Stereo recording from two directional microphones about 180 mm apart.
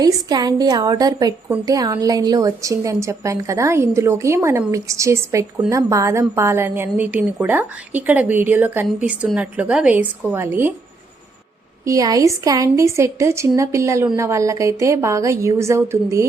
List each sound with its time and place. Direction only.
0.0 s a woman's voice: 20° right (ahead or behind)
11.9 s a woman's voice: 20° right (ahead or behind)